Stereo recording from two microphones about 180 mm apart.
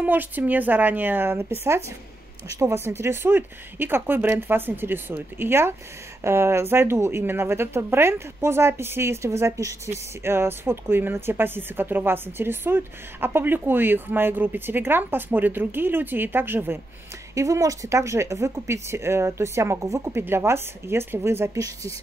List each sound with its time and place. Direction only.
0.0 s speech: 10° right (ahead or behind)